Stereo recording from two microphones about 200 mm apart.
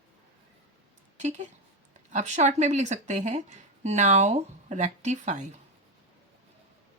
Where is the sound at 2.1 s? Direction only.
35° right (ahead or behind).